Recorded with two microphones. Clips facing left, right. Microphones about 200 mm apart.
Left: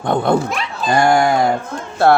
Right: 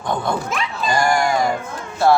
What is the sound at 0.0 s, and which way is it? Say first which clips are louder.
Speech: left 6 dB; 60° left (ahead or behind).